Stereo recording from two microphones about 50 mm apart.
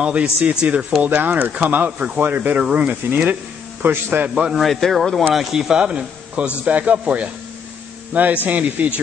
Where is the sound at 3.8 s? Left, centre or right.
Right.